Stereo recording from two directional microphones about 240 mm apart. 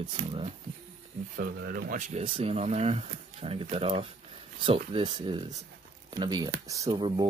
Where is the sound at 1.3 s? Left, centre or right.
Right.